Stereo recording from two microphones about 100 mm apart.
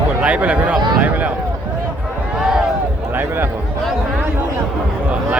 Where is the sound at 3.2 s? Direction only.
20° right (ahead or behind).